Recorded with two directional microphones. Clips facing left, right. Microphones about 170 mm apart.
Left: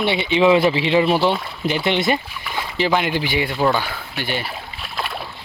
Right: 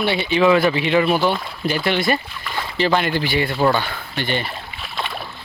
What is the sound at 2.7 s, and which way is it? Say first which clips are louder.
Speech: right 1 dB; 15° left (ahead or behind).